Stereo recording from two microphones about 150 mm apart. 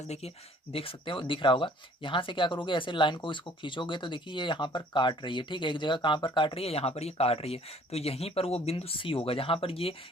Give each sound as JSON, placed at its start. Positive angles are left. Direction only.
{"t": 0.7, "sound": "speech", "side_deg": 35}